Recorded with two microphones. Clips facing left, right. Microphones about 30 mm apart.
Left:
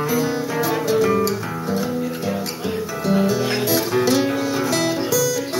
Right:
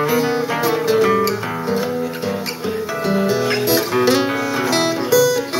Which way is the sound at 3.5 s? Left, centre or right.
Right.